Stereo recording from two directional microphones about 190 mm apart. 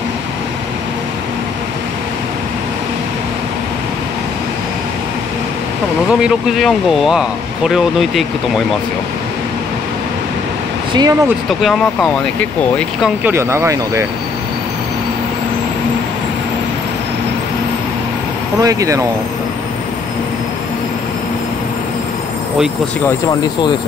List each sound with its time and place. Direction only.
6.2 s speech: centre (ahead or behind)
10.9 s speech: 20° right (ahead or behind)
11.4 s speech: centre (ahead or behind)
13.2 s speech: 15° right (ahead or behind)
18.6 s speech: 15° right (ahead or behind)